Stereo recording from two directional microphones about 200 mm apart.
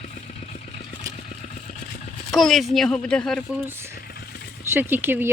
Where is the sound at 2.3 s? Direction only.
Centre (ahead or behind).